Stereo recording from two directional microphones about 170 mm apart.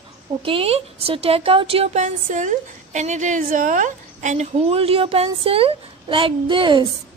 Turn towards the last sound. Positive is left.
turn(degrees=-30)  # may be behind; listen again after turning